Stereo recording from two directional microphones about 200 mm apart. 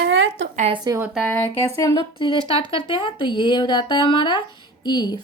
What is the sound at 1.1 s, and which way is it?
Speech, 10° left (ahead or behind).